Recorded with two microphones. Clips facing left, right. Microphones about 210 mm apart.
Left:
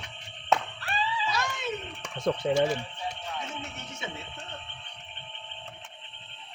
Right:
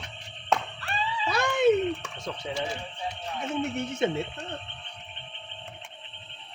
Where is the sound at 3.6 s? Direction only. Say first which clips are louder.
Right 13 dB; 55° right (ahead or behind).